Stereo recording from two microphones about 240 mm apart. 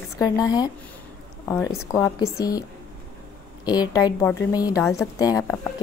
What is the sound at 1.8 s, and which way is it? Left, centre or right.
Speech, centre.